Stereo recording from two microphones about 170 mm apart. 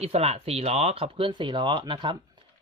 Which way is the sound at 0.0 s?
40° right (ahead or behind).